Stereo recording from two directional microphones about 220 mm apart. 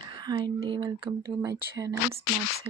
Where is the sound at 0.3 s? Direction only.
20° right (ahead or behind).